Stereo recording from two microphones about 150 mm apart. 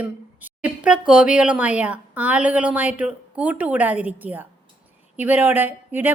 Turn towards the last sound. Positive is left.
turn(degrees=-10)  # may be behind; listen again after turning